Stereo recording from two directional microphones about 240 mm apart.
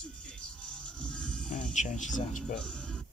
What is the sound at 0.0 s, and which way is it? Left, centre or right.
Music, centre.